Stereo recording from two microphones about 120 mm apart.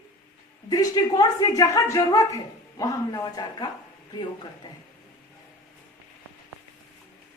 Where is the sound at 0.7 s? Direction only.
30° left (ahead or behind).